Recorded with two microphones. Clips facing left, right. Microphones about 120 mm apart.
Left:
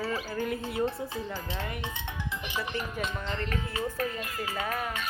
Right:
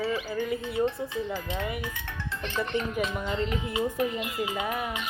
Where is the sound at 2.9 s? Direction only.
10° right (ahead or behind).